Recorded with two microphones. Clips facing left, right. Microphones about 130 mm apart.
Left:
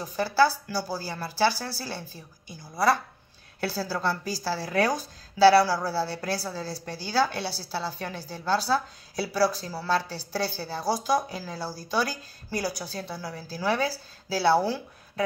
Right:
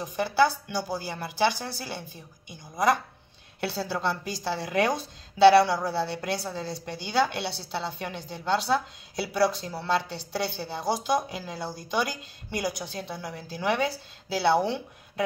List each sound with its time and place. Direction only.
0.0 s a woman's voice: 20° right (ahead or behind)